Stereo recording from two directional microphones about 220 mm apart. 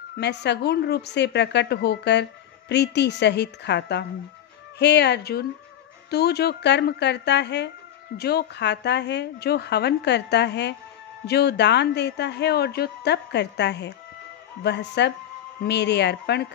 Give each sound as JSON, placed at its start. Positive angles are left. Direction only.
{"t": 0.2, "sound": "a woman's voice", "side_deg": 50}